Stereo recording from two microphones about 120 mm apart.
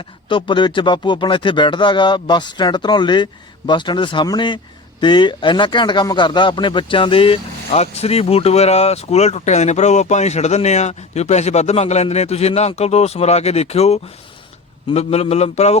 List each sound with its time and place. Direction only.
0.3 s speech: 45° left (ahead or behind); by 15.8 s 65° left (ahead or behind)